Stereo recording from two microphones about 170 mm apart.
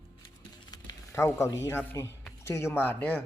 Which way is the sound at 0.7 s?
20° left (ahead or behind).